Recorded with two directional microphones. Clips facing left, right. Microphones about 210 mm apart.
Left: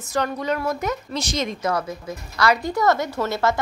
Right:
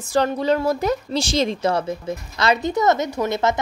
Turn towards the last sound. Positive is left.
turn(degrees=-20)  # may be behind; listen again after turning